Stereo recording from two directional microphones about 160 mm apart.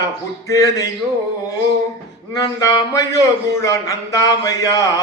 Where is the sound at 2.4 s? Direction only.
20° left (ahead or behind).